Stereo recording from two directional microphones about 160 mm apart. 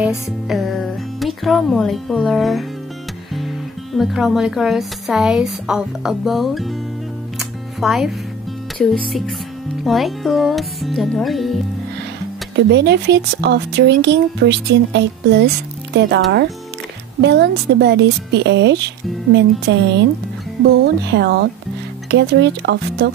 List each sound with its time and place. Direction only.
0.0 s speech: centre (ahead or behind)
7.3 s music: centre (ahead or behind)
9.8 s speech: centre (ahead or behind)
12.5 s speech: 90° right